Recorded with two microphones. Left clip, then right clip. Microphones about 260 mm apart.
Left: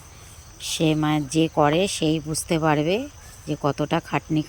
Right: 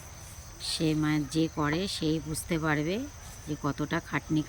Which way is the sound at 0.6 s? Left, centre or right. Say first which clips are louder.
Left 7 dB; centre.